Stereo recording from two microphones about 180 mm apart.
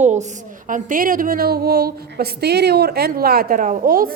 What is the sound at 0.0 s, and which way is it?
A woman's voice, 40° right (ahead or behind).